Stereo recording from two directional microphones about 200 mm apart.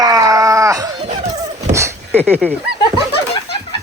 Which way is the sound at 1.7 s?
15° right (ahead or behind).